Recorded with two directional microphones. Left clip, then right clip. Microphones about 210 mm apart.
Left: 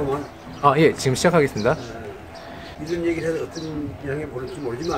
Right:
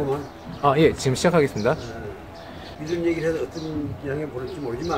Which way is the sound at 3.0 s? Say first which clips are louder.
Even; 10° left (ahead or behind).